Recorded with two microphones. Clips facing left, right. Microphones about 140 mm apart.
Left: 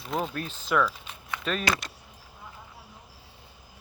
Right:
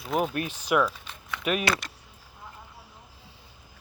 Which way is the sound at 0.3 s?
15° right (ahead or behind).